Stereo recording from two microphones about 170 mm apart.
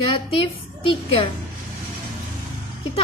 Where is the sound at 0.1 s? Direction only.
30° left (ahead or behind).